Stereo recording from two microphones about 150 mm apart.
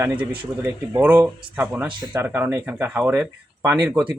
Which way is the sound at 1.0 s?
10° right (ahead or behind).